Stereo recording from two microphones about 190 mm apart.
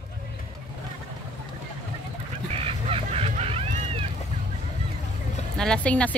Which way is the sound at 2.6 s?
30° right (ahead or behind).